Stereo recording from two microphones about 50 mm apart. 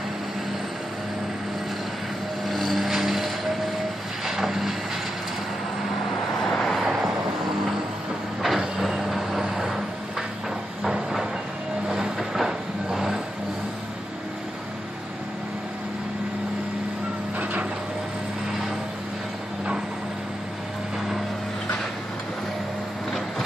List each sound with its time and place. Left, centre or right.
2.4 s vehicle: centre
6.4 s vehicle: centre
8.4 s vehicle: centre
10.8 s train: centre
11.9 s vehicle: centre
17.4 s a sound: right